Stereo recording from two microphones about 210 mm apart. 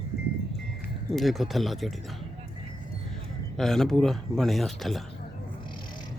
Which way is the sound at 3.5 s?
Centre (ahead or behind).